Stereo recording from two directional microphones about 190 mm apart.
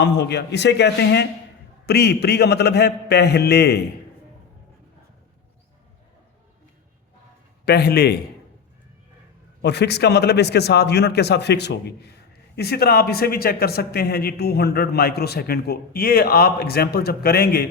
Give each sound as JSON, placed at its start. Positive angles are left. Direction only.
{"t": 0.0, "sound": "a man's voice", "side_deg": 60}
{"t": 7.6, "sound": "a man's voice", "side_deg": 60}
{"t": 9.6, "sound": "a man's voice", "side_deg": 60}